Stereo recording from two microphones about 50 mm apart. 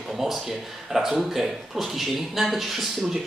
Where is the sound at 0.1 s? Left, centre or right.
Centre.